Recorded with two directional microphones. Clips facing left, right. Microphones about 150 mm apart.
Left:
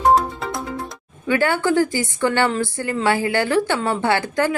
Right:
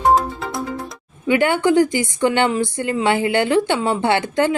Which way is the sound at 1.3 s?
20° right (ahead or behind).